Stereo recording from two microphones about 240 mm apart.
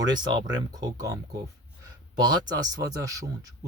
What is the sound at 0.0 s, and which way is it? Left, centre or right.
Speech, centre.